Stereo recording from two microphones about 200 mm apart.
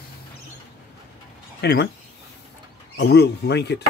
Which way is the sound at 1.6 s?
55° left (ahead or behind).